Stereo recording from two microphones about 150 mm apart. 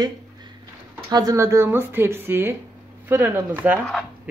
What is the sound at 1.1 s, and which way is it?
Speech, 25° right (ahead or behind).